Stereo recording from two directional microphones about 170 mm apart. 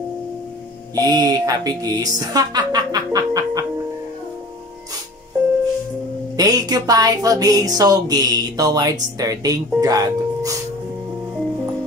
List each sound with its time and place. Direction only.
0.9 s speech: 20° right (ahead or behind)
6.3 s speech: 20° right (ahead or behind)